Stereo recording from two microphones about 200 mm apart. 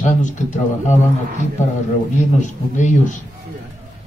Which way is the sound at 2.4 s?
35° left (ahead or behind).